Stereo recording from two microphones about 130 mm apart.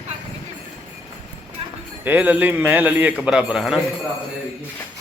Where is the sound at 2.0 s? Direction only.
15° right (ahead or behind).